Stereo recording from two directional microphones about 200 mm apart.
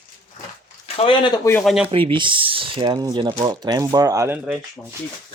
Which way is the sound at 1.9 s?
25° right (ahead or behind).